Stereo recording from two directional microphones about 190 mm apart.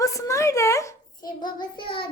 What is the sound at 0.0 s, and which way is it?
Child singing, 15° left (ahead or behind).